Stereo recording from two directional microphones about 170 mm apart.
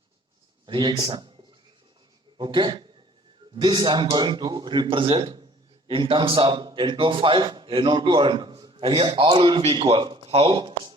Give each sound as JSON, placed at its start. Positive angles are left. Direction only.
{"t": 0.6, "sound": "speech", "side_deg": -25}
{"t": 2.4, "sound": "a man's voice", "side_deg": -30}